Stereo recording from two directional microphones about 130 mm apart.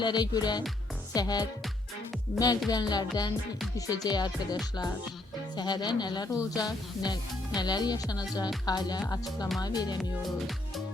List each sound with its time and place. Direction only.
0.0 s speech: 35° left (ahead or behind)
2.6 s speech: 30° left (ahead or behind)
3.8 s music: 30° left (ahead or behind)
5.5 s speech: 35° left (ahead or behind)
10.0 s music: centre (ahead or behind)